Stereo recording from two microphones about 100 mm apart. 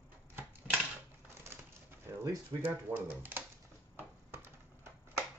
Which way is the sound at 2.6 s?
20° right (ahead or behind).